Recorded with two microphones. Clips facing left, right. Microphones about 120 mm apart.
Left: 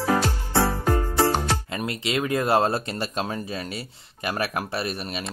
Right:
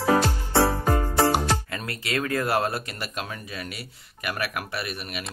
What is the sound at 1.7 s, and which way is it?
Speech, 20° left (ahead or behind).